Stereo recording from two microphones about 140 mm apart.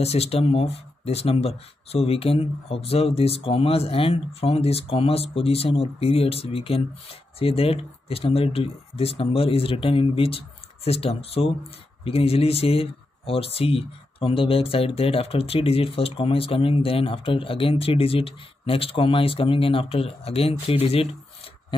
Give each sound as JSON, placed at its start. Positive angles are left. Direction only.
{"t": 0.0, "sound": "speech", "side_deg": 50}